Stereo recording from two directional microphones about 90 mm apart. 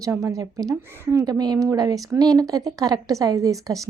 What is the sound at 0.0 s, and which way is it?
Speech, 35° right (ahead or behind).